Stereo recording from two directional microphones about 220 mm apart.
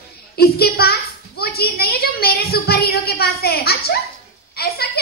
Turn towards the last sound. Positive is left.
turn(degrees=45)  # may be behind; listen again after turning